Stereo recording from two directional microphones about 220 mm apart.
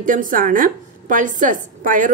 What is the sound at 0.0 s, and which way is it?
A woman's voice, 40° right (ahead or behind).